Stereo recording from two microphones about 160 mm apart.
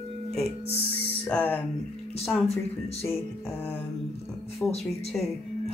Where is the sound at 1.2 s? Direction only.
10° left (ahead or behind).